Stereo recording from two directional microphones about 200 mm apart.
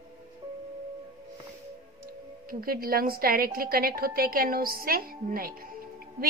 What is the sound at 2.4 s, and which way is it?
A woman's voice, 45° right (ahead or behind).